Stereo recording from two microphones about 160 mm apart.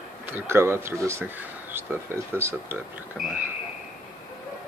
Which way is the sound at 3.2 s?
Centre (ahead or behind).